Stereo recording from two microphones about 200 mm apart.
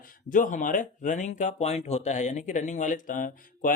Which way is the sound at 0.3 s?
40° left (ahead or behind).